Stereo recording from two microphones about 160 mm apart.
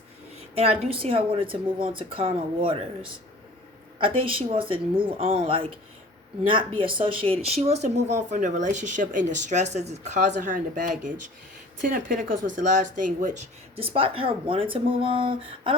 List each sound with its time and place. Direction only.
0.3 s speech: 35° right (ahead or behind)
3.9 s speech: 35° right (ahead or behind); by 13.4 s 50° right (ahead or behind)
13.7 s speech: 35° right (ahead or behind)